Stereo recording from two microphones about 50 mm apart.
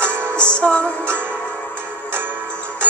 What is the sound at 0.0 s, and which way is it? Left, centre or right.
Music, right.